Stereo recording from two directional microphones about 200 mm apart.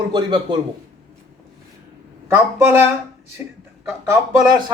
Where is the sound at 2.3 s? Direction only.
10° right (ahead or behind).